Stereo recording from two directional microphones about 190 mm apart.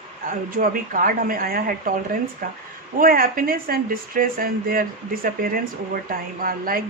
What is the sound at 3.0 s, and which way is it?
Speech, 50° right (ahead or behind).